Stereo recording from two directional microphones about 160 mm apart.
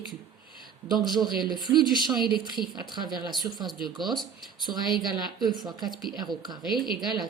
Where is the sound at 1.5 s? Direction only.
25° right (ahead or behind).